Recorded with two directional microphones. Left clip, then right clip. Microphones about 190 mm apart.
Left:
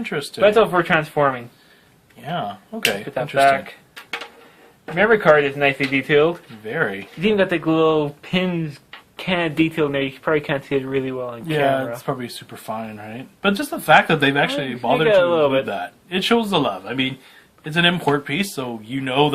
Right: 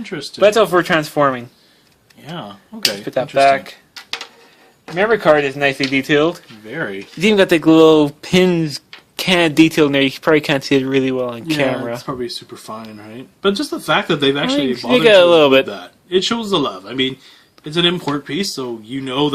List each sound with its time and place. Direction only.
0.0 s speech: 35° left (ahead or behind)
0.3 s speech: 55° right (ahead or behind)
2.2 s speech: 35° left (ahead or behind)
3.3 s speech: 55° right (ahead or behind)
4.9 s speech: 45° right (ahead or behind)
6.7 s speech: 35° left (ahead or behind)
7.2 s speech: 60° right (ahead or behind)
12.0 s speech: 35° left (ahead or behind)
15.0 s speech: 60° right (ahead or behind)
15.7 s speech: 30° left (ahead or behind)